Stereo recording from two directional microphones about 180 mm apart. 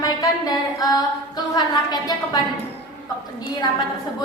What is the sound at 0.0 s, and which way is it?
Singing, 20° left (ahead or behind).